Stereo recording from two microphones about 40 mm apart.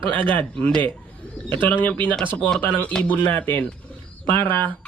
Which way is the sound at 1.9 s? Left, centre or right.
Left.